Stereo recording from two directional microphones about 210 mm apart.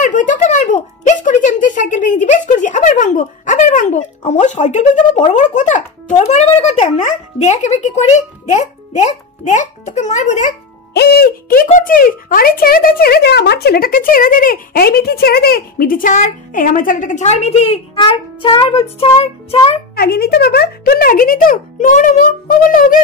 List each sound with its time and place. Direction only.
0.0 s a child's voice: 35° left (ahead or behind)
10.9 s speech: 50° left (ahead or behind); by 19.8 s 30° left (ahead or behind)
20.0 s speech: 45° left (ahead or behind)